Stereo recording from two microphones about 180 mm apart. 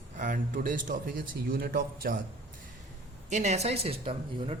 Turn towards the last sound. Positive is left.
turn(degrees=-30)  # may be behind; listen again after turning